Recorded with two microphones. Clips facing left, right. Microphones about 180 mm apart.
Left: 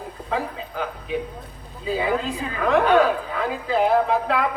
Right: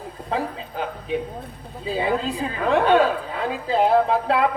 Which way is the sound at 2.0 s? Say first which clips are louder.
Right 2 dB; 35° right (ahead or behind).